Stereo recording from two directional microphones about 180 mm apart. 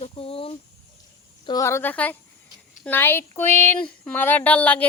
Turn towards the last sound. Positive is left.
turn(degrees=10)  # may be behind; listen again after turning